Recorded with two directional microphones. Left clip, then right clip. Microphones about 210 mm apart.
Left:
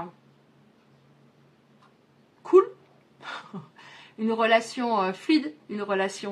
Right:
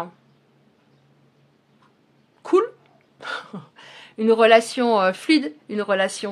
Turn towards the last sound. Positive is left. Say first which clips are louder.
# right 6 dB
turn(degrees=-45)  # may be behind; listen again after turning